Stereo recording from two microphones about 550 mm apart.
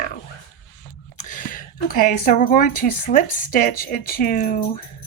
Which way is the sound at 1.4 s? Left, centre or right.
Centre.